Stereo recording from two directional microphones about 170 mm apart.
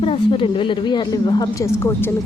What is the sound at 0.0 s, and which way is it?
A woman's voice, 30° left (ahead or behind).